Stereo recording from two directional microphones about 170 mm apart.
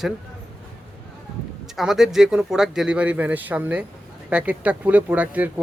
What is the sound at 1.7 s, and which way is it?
Speech, centre (ahead or behind).